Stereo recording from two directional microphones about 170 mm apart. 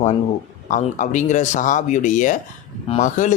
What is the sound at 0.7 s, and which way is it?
Speech, 45° left (ahead or behind).